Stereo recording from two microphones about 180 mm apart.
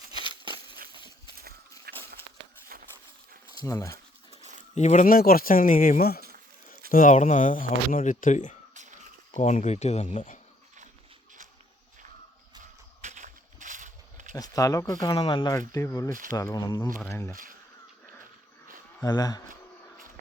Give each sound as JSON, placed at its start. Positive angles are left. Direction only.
{"t": 1.9, "sound": "a sound", "side_deg": -60}
{"t": 3.6, "sound": "speech", "side_deg": 15}
{"t": 4.3, "sound": "dog", "side_deg": -40}
{"t": 4.7, "sound": "speech", "side_deg": 40}
{"t": 6.9, "sound": "speech", "side_deg": 45}
{"t": 8.7, "sound": "a sound", "side_deg": -40}
{"t": 9.4, "sound": "speech", "side_deg": 40}
{"t": 13.0, "sound": "a sound", "side_deg": -45}
{"t": 14.3, "sound": "speech", "side_deg": 20}
{"t": 19.0, "sound": "speech", "side_deg": 20}